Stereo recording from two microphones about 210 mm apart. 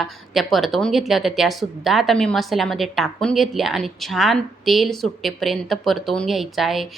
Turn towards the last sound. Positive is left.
turn(degrees=0)  # may be behind; listen again after turning